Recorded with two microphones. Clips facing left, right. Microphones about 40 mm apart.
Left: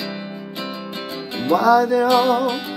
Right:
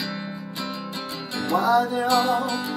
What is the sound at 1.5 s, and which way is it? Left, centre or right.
Music, left.